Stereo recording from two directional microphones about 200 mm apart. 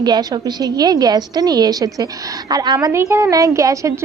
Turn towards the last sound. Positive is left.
turn(degrees=-15)  # may be behind; listen again after turning